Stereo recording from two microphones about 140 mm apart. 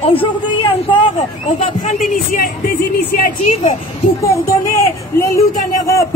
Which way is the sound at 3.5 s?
55° left (ahead or behind).